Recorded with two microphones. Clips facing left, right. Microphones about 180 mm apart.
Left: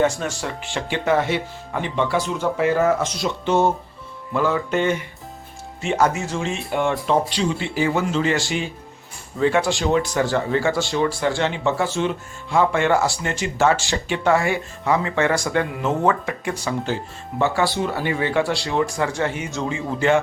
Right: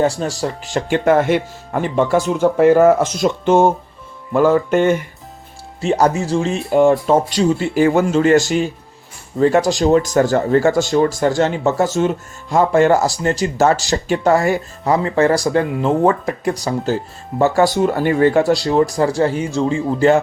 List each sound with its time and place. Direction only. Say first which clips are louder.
0.0 s speech: right 3 dB; 35° right (ahead or behind)
5.8 s speech: right 5 dB; 35° right (ahead or behind)